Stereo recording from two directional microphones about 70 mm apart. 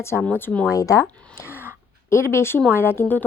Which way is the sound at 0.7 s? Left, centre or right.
Left.